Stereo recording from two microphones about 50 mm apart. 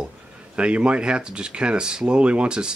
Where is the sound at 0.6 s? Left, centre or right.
Right.